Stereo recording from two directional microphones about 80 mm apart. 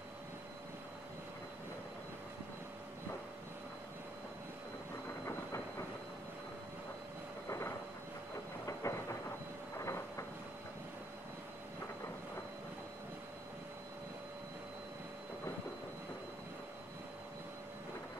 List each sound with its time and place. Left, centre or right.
5.2 s train: left
7.4 s vehicle: left
8.6 s thunder: left
9.8 s train: left